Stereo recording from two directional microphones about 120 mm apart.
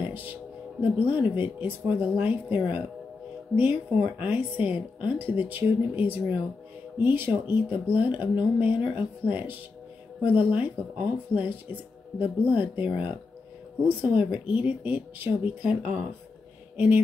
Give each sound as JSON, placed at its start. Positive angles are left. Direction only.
{"t": 0.1, "sound": "music", "side_deg": -15}
{"t": 1.3, "sound": "speech", "side_deg": -15}
{"t": 16.7, "sound": "a sound", "side_deg": -15}